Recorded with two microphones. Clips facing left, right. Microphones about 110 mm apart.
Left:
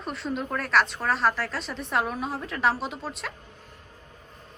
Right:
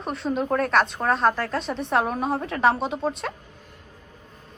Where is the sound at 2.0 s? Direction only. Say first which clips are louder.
Right 4 dB; 45° right (ahead or behind).